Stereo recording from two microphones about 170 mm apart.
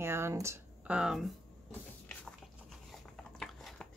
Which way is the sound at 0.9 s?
5° right (ahead or behind).